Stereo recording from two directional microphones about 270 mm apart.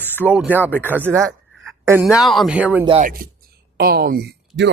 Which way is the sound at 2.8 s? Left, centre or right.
Centre.